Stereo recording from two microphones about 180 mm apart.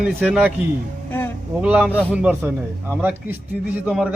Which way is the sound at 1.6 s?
5° right (ahead or behind).